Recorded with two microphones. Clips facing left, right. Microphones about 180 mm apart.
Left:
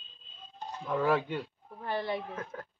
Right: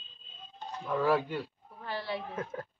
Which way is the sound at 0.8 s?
Centre (ahead or behind).